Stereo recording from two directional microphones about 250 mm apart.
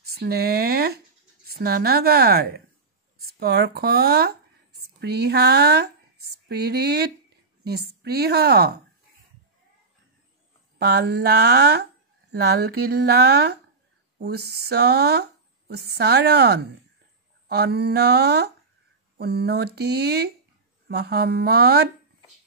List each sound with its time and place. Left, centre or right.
0.1 s speech: right
10.8 s speech: right